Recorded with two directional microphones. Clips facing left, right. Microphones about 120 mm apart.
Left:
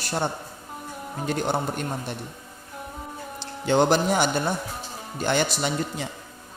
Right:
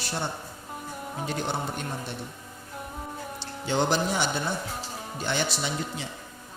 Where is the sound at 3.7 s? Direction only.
55° left (ahead or behind).